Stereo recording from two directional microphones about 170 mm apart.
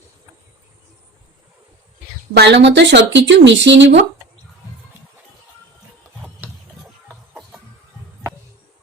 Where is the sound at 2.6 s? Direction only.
90° right.